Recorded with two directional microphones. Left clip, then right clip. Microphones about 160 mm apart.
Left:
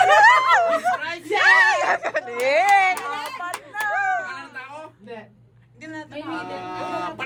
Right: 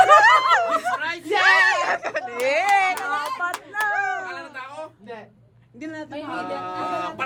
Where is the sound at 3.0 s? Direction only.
90° right.